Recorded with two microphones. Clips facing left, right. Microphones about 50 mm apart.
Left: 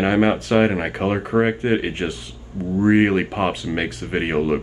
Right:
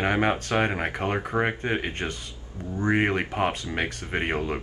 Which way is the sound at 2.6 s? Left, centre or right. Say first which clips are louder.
Left 8 dB; centre.